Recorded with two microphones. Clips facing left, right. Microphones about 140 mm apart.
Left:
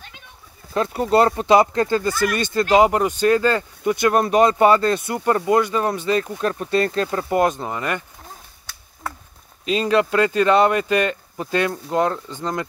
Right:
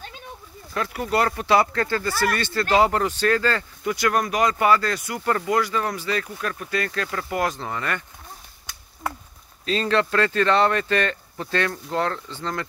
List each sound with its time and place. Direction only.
0.7 s speech: 25° left (ahead or behind)
9.7 s speech: 15° left (ahead or behind)